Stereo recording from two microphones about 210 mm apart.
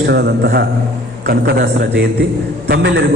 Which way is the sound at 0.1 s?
50° right (ahead or behind).